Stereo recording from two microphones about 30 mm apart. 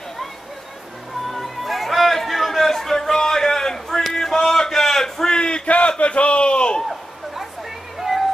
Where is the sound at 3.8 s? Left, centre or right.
Centre.